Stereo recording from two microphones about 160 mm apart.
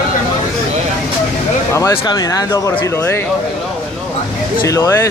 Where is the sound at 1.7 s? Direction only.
20° left (ahead or behind).